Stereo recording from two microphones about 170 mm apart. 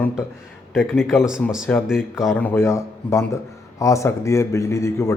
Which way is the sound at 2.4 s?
10° left (ahead or behind).